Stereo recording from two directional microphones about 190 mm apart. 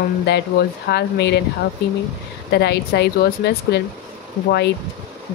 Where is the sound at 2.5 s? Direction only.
60° left (ahead or behind).